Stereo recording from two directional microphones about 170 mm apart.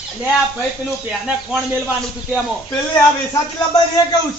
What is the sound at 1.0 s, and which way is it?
Speech, 5° right (ahead or behind).